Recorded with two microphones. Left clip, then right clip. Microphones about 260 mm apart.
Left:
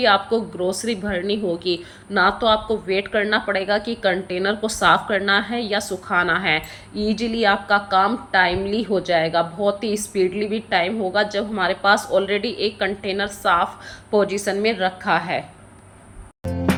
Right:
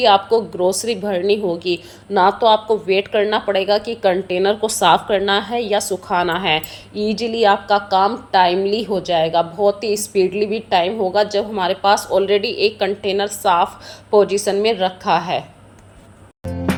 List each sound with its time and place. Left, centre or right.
0.0 s a woman's voice: centre
16.4 s music: centre